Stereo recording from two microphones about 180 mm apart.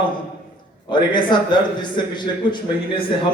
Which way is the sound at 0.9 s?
25° left (ahead or behind).